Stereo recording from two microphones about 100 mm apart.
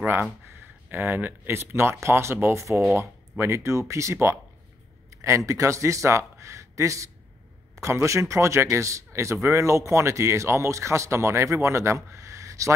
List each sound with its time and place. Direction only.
0.0 s a man's voice: 20° right (ahead or behind)
5.1 s a sound: 30° right (ahead or behind)
5.5 s a man's voice: 30° right (ahead or behind)